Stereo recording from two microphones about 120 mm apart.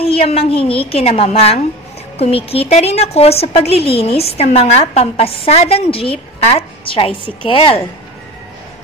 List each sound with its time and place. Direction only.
0.0 s a woman's voice: 55° left (ahead or behind)